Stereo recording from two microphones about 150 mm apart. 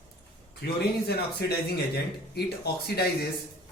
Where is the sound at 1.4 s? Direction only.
90° left.